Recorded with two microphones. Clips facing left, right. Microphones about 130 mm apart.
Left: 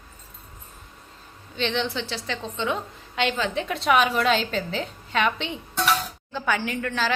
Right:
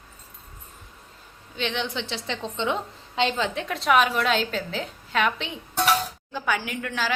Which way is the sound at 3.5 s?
Centre (ahead or behind).